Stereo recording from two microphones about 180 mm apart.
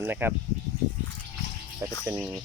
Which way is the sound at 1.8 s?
15° right (ahead or behind).